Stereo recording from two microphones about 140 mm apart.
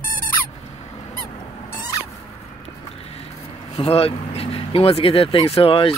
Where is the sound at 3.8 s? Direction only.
45° left (ahead or behind).